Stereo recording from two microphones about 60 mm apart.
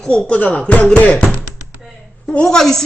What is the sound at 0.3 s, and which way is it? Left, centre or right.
Speech, left.